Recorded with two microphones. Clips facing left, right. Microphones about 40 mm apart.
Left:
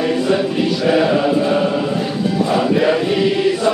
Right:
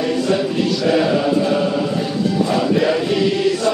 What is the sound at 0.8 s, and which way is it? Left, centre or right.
Chant, centre.